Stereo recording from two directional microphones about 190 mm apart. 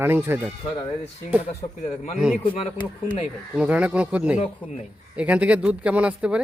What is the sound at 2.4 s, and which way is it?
Speech, 30° left (ahead or behind).